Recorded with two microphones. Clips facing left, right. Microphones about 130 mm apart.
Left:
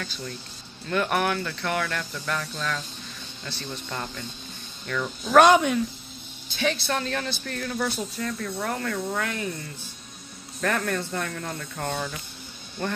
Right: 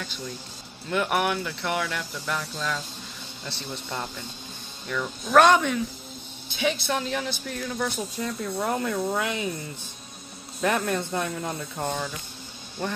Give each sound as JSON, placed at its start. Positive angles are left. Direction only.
{"t": 0.8, "sound": "speech", "side_deg": -10}
{"t": 3.9, "sound": "speech", "side_deg": -10}
{"t": 5.2, "sound": "speech", "side_deg": 5}
{"t": 6.5, "sound": "speech", "side_deg": -15}
{"t": 8.2, "sound": "speech", "side_deg": -20}
{"t": 10.6, "sound": "speech", "side_deg": -20}